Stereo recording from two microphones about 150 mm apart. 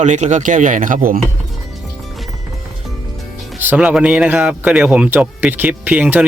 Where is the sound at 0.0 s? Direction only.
55° right (ahead or behind).